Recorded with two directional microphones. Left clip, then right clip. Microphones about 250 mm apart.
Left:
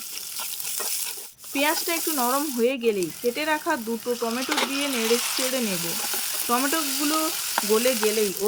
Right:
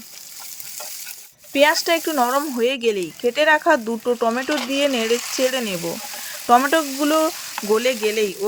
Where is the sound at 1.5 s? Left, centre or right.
Right.